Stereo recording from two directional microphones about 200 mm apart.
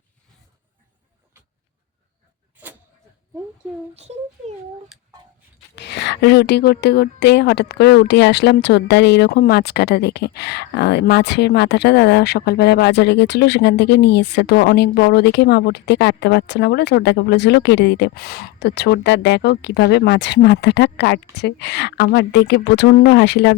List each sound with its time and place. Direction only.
3.9 s speech: 35° right (ahead or behind)
4.9 s a sound: centre (ahead or behind)
5.7 s speech: 60° left (ahead or behind)